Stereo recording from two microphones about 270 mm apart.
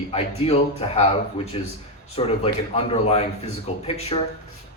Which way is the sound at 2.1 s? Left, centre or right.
Left.